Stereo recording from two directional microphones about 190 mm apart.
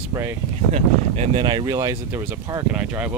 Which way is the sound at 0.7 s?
35° right (ahead or behind).